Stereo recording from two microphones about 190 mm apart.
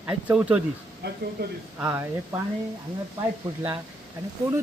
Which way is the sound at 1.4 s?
55° right (ahead or behind).